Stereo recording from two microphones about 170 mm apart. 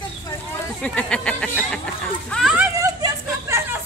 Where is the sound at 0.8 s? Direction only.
5° left (ahead or behind).